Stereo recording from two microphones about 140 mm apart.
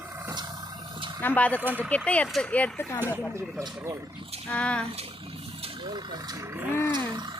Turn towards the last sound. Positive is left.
turn(degrees=-30)  # may be behind; listen again after turning